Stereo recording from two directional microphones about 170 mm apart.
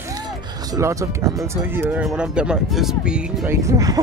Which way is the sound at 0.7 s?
20° right (ahead or behind).